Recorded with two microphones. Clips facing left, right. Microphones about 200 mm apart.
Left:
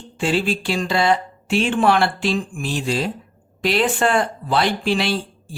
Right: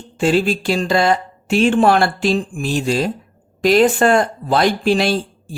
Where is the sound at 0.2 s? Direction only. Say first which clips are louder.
Right 5 dB; 45° right (ahead or behind).